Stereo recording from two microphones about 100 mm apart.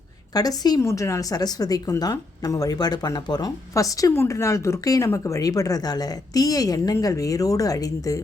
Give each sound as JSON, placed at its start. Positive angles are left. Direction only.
{"t": 0.3, "sound": "speech", "side_deg": 40}
{"t": 0.8, "sound": "speech", "side_deg": 30}